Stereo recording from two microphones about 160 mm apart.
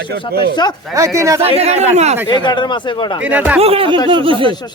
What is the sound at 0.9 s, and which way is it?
Speech, 20° right (ahead or behind).